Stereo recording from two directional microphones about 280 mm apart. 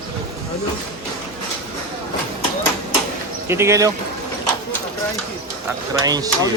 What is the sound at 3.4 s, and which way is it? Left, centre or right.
Speech, centre.